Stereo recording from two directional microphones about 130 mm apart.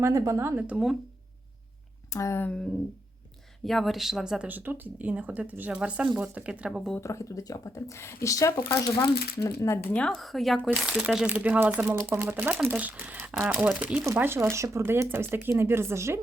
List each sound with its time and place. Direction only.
0.0 s speech: 25° right (ahead or behind); by 0.9 s 5° right (ahead or behind)
2.1 s speech: 20° left (ahead or behind)
3.6 s speech: centre (ahead or behind)
7.0 s speech: 25° left (ahead or behind)
9.9 s a woman's voice: 5° left (ahead or behind); by 16.2 s 20° right (ahead or behind)